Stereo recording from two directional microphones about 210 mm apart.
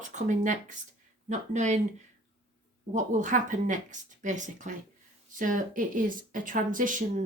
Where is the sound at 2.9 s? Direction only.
35° right (ahead or behind).